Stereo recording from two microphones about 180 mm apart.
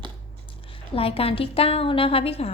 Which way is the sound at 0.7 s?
30° left (ahead or behind).